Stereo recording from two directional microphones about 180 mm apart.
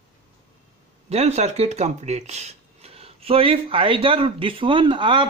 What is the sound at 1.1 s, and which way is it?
Speech, 35° right (ahead or behind).